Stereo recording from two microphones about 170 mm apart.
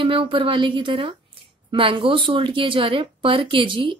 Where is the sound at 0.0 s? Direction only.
30° right (ahead or behind).